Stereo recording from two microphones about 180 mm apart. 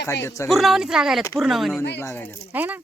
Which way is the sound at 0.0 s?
15° left (ahead or behind).